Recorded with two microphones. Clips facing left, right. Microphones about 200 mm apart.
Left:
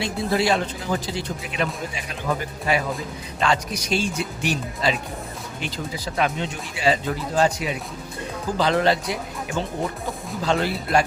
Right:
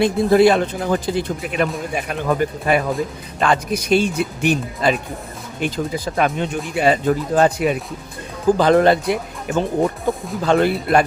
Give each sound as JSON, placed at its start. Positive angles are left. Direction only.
{"t": 0.0, "sound": "speech", "side_deg": -55}